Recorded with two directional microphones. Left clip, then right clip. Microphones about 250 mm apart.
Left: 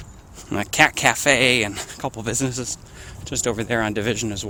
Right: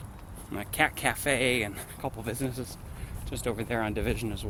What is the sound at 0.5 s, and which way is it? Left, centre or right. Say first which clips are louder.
Speech: left 10 dB; left.